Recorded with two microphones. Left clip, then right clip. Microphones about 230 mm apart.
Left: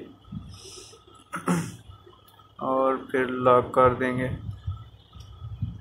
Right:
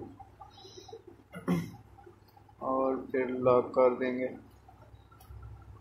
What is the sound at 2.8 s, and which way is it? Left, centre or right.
Speech, centre.